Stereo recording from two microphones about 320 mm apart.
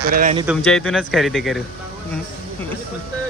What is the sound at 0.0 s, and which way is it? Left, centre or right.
Speech, right.